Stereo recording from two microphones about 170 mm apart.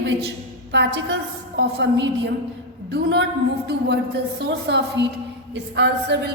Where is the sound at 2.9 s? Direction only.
80° right.